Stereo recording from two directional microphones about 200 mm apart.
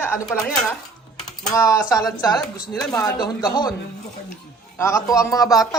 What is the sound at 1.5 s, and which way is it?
Speech, 15° left (ahead or behind).